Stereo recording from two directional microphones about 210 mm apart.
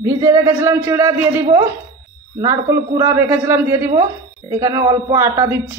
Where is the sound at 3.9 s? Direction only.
20° right (ahead or behind).